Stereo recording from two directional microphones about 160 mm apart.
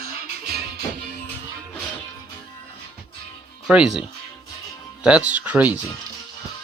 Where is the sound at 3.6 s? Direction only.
5° right (ahead or behind).